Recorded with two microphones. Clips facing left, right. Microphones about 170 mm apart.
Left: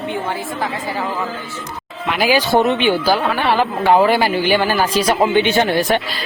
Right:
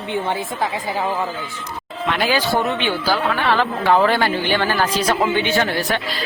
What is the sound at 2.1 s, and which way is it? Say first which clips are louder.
A woman's voice: left 4 dB; 10° left (ahead or behind).